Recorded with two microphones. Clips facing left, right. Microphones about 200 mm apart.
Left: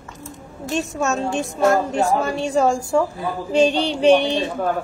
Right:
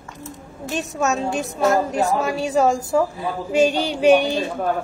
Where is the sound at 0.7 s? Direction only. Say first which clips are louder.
Left 1 dB; centre (ahead or behind).